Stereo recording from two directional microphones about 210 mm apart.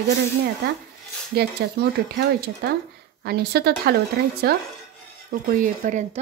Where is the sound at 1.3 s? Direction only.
50° right (ahead or behind); by 6.2 s 35° right (ahead or behind).